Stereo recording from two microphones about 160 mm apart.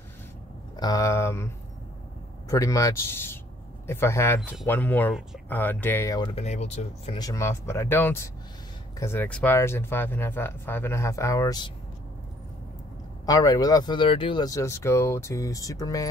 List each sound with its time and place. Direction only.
0.7 s speech: 25° left (ahead or behind)
2.5 s speech: 20° left (ahead or behind)
6.1 s speech: 30° left (ahead or behind)
6.4 s speech: 45° left (ahead or behind)
7.2 s speech: 20° left (ahead or behind)
13.2 s speech: 25° left (ahead or behind)